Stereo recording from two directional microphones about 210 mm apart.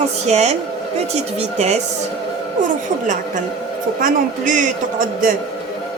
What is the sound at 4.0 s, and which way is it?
Speech, 40° right (ahead or behind).